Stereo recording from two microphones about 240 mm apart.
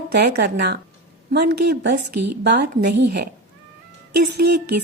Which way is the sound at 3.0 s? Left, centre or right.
Right.